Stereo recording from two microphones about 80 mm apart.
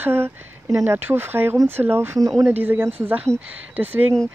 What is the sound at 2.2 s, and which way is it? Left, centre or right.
Speech, right.